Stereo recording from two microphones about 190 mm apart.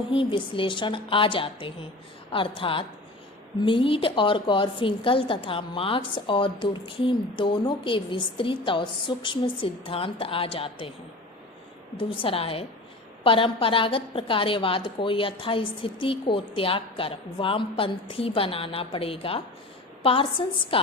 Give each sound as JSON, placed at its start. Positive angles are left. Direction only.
{"t": 0.1, "sound": "a woman's voice", "side_deg": 25}
{"t": 11.9, "sound": "a woman's voice", "side_deg": 25}